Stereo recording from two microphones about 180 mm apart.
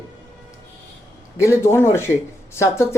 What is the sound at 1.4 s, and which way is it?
Speech, 15° left (ahead or behind).